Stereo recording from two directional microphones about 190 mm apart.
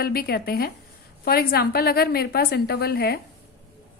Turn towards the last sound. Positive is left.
turn(degrees=55)  # may be behind; listen again after turning